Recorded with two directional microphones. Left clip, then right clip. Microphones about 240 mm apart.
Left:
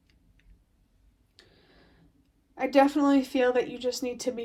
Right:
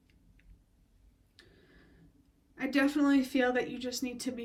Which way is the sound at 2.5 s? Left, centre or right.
Centre.